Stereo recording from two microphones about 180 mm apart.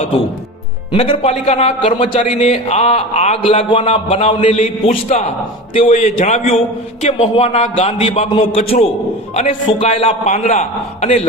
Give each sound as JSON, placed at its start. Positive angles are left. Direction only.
{"t": 0.9, "sound": "a man's voice", "side_deg": 30}